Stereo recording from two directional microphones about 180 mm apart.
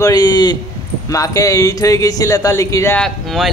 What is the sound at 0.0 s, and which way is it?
Speech, 20° left (ahead or behind).